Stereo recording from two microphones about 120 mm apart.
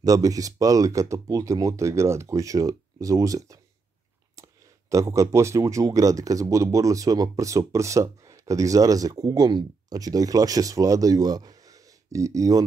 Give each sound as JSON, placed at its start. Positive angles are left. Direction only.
{"t": 0.0, "sound": "speech", "side_deg": -30}